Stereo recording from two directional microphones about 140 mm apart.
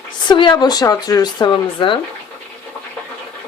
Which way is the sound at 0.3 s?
35° left (ahead or behind).